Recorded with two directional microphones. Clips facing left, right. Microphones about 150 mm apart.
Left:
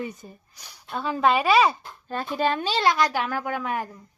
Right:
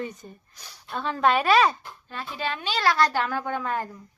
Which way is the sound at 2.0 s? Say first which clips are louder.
Left 7 dB; 45° left (ahead or behind).